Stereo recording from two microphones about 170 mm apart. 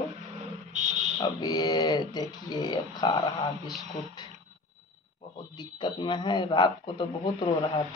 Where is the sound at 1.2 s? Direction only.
25° left (ahead or behind).